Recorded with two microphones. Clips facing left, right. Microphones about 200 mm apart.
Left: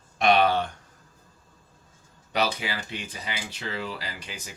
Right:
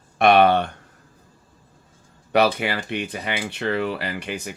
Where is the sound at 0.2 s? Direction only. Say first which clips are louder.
Right 6 dB; 60° right (ahead or behind).